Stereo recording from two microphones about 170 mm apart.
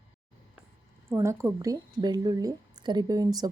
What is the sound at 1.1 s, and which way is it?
A woman's voice, 15° right (ahead or behind).